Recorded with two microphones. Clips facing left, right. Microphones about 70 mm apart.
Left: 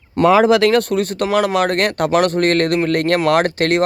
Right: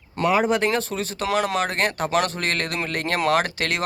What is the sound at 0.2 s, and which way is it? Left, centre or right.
Speech, left.